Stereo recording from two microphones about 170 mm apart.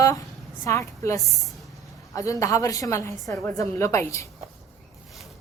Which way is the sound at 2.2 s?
20° left (ahead or behind).